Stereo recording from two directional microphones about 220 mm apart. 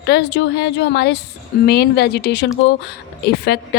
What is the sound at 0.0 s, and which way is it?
Speech, 50° left (ahead or behind).